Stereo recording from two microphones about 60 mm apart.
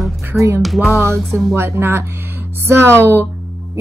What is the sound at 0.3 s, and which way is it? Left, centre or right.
Speech, centre.